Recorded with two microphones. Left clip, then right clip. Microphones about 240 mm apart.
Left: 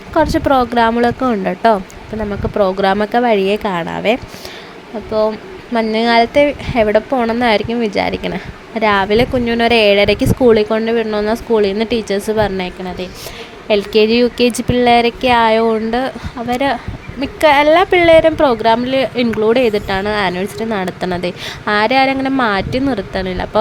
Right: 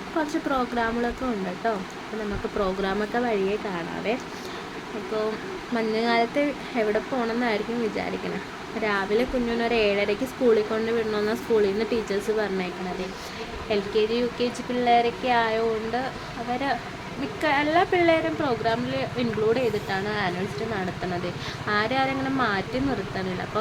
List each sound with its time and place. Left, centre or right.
0.3 s speech: left
5.7 s speech: left
13.7 s speech: left